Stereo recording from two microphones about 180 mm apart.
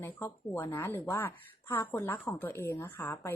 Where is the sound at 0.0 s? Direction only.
15° left (ahead or behind).